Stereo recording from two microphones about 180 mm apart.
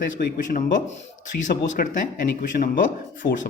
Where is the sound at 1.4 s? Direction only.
45° left (ahead or behind).